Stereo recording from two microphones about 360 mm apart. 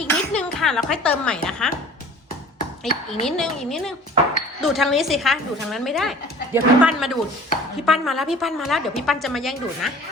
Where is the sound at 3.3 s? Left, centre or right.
Centre.